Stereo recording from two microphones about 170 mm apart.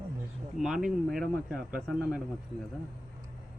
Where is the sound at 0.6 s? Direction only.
5° right (ahead or behind).